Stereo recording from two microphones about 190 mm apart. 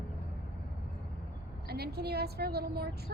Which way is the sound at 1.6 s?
55° right (ahead or behind).